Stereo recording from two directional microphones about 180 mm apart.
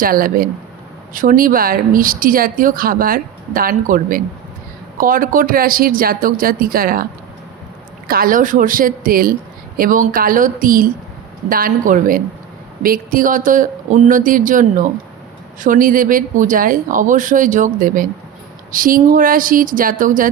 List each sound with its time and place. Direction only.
0.0 s speech: 50° right (ahead or behind)